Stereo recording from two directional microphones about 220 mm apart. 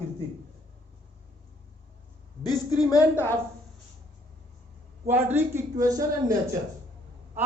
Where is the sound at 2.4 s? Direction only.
15° left (ahead or behind).